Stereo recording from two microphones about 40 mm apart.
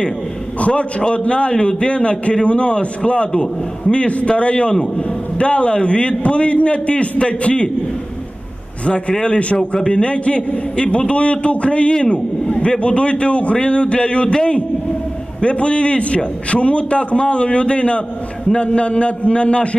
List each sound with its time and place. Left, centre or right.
0.6 s a man's voice: left
8.8 s a man's voice: left